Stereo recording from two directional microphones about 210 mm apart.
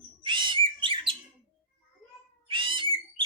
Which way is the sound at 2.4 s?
25° right (ahead or behind).